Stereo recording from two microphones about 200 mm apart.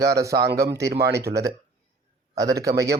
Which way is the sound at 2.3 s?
15° right (ahead or behind).